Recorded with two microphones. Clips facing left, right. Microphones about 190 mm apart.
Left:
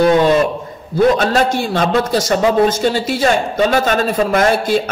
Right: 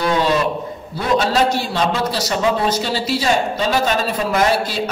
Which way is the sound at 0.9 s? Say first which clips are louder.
Left 5 dB; 50° left (ahead or behind).